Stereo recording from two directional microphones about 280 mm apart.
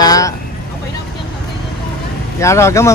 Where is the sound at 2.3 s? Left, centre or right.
Centre.